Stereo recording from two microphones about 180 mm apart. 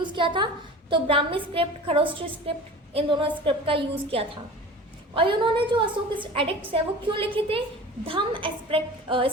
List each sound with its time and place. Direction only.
0.0 s a woman's voice: 25° right (ahead or behind)